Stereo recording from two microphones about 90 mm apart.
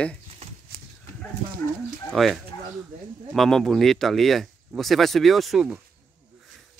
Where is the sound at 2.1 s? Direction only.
Centre (ahead or behind).